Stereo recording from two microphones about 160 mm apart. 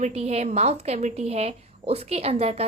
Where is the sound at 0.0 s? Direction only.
45° right (ahead or behind).